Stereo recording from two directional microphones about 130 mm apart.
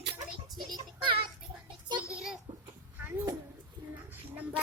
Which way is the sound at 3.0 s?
25° right (ahead or behind).